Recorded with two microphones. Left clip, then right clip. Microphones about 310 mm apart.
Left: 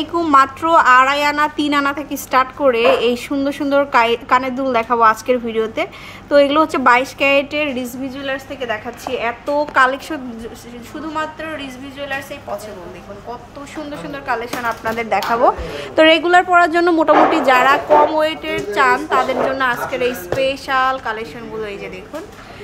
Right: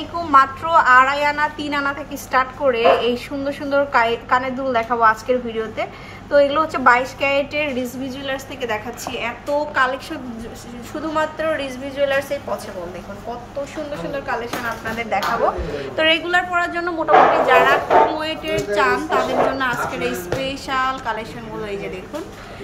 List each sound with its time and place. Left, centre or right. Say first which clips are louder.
0.1 s a woman's voice: left 2 dB; left
11.1 s a woman's voice: right 3 dB; centre
14.1 s a woman's voice: left 4 dB; centre